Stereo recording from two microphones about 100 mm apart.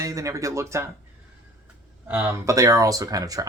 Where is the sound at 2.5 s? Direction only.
35° right (ahead or behind).